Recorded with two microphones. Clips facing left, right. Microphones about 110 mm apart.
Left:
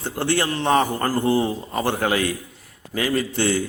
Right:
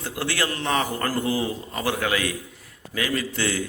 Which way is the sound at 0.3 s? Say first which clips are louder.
Left 6 dB; 25° left (ahead or behind).